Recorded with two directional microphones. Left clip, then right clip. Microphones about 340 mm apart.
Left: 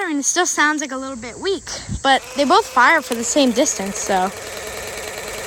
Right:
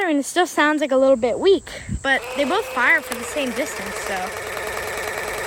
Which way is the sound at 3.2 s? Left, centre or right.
Centre.